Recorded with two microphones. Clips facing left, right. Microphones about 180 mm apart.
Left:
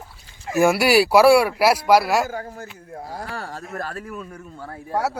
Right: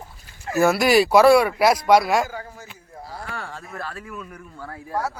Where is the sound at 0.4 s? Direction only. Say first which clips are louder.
Left 1 dB; 10° left (ahead or behind).